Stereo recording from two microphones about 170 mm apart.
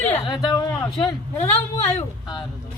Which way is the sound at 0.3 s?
25° left (ahead or behind).